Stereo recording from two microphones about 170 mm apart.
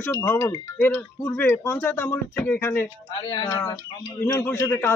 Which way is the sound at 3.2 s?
30° left (ahead or behind).